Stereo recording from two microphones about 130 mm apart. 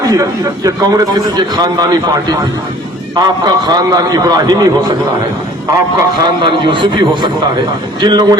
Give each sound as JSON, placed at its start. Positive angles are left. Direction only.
{"t": 0.1, "sound": "a man's voice", "side_deg": -30}
{"t": 6.2, "sound": "a man's voice", "side_deg": -40}